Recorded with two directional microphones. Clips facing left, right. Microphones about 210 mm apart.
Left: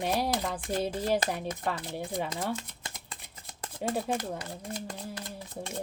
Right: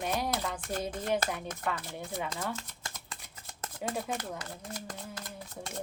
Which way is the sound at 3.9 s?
30° left (ahead or behind).